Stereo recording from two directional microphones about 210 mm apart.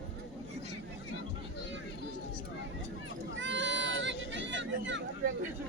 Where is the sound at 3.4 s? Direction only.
60° right (ahead or behind).